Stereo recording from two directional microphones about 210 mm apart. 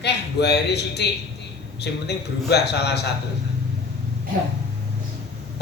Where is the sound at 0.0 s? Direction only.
50° left (ahead or behind).